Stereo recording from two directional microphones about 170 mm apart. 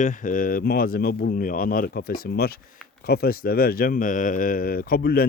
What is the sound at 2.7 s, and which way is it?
Insect, 5° left (ahead or behind).